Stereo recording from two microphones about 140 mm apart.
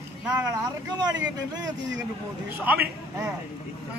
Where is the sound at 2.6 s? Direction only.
15° right (ahead or behind).